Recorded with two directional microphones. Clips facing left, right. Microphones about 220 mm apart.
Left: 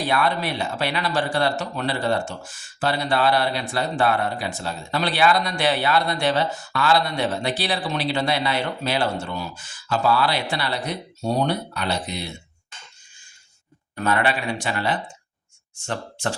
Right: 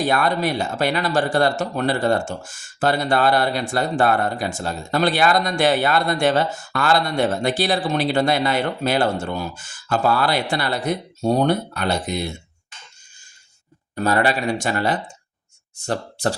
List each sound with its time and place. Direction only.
0.0 s speech: 45° right (ahead or behind)
13.9 s speech: 40° right (ahead or behind)